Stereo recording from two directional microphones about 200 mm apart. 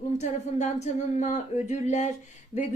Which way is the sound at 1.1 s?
35° left (ahead or behind).